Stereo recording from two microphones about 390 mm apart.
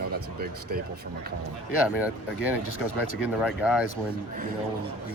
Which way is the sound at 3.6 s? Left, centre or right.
Centre.